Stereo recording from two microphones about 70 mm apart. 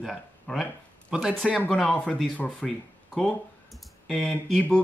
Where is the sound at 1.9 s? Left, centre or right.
Centre.